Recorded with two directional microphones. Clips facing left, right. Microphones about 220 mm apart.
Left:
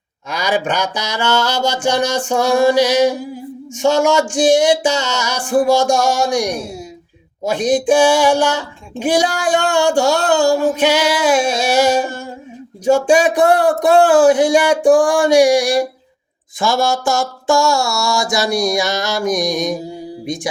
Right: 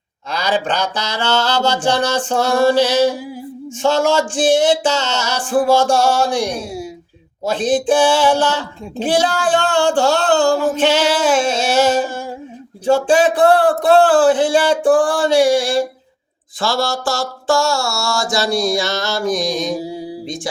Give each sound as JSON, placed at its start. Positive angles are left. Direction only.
{"t": 0.3, "sound": "speech", "side_deg": 15}